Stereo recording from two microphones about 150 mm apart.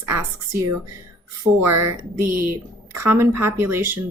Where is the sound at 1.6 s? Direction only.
20° right (ahead or behind).